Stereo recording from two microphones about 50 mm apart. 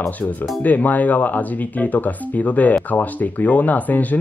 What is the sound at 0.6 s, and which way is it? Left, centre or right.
Speech, left.